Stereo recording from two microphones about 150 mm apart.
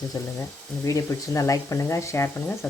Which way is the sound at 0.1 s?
25° left (ahead or behind).